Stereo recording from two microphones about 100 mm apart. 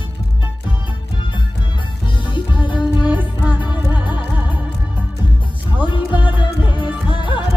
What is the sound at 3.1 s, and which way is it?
Music, 15° right (ahead or behind).